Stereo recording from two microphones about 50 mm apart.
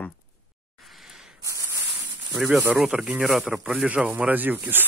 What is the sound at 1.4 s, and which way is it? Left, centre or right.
Spray, right.